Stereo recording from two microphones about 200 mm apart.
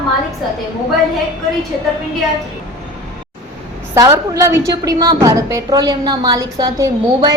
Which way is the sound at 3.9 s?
15° right (ahead or behind).